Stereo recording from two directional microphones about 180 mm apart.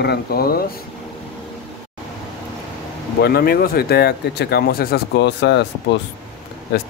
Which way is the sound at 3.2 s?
60° left (ahead or behind).